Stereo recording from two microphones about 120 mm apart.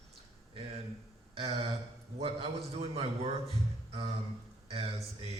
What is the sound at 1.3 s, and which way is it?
A man's voice, 55° right (ahead or behind).